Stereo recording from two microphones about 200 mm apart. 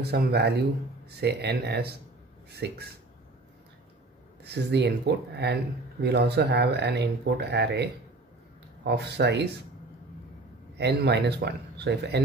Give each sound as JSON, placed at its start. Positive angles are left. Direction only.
{"t": 0.0, "sound": "speech", "side_deg": -55}
{"t": 4.5, "sound": "speech", "side_deg": -55}
{"t": 10.8, "sound": "speech", "side_deg": -55}